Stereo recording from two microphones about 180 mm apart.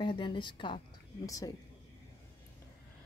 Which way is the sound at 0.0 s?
25° left (ahead or behind).